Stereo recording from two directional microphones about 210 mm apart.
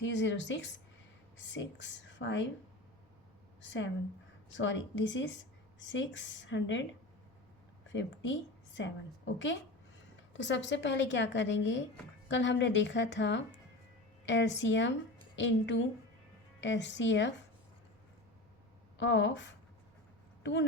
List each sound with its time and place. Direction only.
0.0 s speech: 60° left (ahead or behind)
3.6 s speech: 60° left (ahead or behind)
7.9 s speech: 60° left (ahead or behind)
10.3 s speech: 60° left (ahead or behind)
18.9 s speech: 60° left (ahead or behind)